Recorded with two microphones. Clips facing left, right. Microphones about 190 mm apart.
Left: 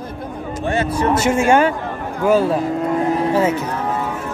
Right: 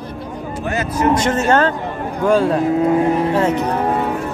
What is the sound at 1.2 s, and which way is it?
Speech, 10° left (ahead or behind).